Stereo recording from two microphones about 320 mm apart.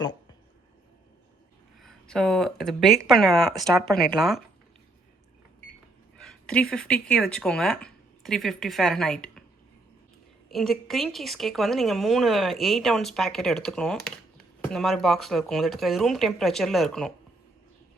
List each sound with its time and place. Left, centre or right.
1.8 s a woman's voice: centre
6.1 s speech: centre
10.5 s a woman's voice: centre